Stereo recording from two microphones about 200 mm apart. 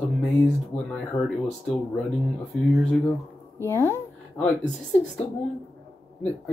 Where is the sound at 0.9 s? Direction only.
Centre (ahead or behind).